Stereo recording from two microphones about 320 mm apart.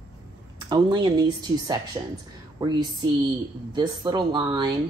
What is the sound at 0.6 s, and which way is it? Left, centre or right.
Speech, centre.